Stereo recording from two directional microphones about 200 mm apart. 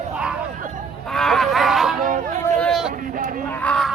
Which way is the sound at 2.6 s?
Centre (ahead or behind).